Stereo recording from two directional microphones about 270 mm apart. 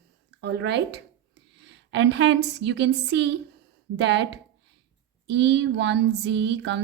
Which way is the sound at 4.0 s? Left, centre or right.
Right.